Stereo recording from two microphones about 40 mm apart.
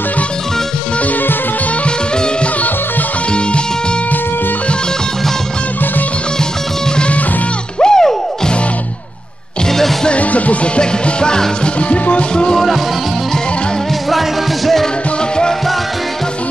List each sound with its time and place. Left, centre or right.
7.8 s music: centre
9.7 s music: centre
10.0 s music: left
10.8 s music: left